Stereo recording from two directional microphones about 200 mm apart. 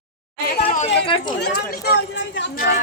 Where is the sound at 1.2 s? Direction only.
50° left (ahead or behind).